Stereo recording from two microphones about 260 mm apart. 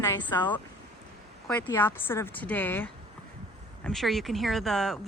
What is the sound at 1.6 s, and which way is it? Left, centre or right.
Speech, centre.